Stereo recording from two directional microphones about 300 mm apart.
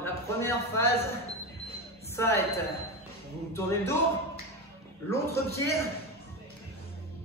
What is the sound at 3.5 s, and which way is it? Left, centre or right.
Speech, centre.